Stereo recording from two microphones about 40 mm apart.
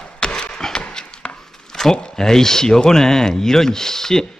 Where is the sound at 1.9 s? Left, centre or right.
Centre.